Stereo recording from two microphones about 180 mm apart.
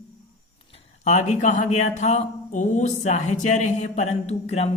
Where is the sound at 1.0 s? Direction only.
40° left (ahead or behind).